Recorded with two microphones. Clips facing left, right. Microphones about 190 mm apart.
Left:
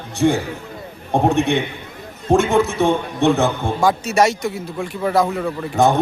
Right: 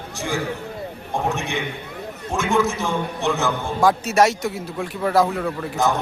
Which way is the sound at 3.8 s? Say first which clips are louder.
Even; centre (ahead or behind).